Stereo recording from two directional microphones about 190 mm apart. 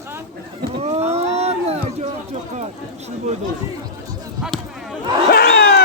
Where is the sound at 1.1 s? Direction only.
35° right (ahead or behind).